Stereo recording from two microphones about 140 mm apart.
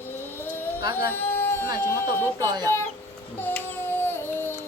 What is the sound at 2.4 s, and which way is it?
Chicken, 30° right (ahead or behind).